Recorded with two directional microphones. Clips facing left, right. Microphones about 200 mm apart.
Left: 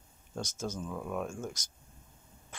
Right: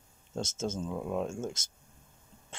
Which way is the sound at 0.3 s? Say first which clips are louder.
Right 3 dB; 25° right (ahead or behind).